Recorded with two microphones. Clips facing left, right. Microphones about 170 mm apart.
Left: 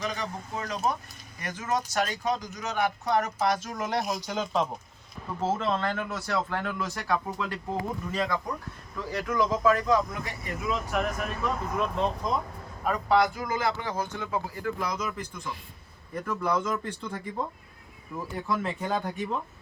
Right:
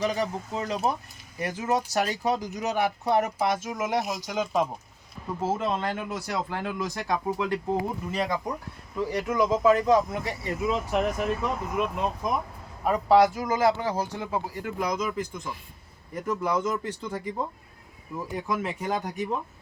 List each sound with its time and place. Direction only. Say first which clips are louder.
0.0 s speech: right 6 dB; 30° right (ahead or behind)
3.8 s speech: right 1 dB; 10° right (ahead or behind); by 13.1 s 25° right (ahead or behind)
13.6 s speech: right 6 dB; 35° right (ahead or behind); by 15.2 s 15° right (ahead or behind)
16.2 s speech: right 2 dB; 15° right (ahead or behind)
18.4 s speech: even; 15° right (ahead or behind)